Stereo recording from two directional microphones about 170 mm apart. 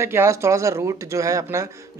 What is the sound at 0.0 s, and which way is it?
Speech, 15° right (ahead or behind).